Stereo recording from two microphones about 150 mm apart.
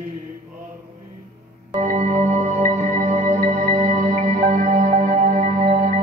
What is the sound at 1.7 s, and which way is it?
Music, 50° right (ahead or behind).